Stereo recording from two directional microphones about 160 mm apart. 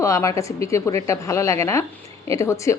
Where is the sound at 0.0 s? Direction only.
20° left (ahead or behind).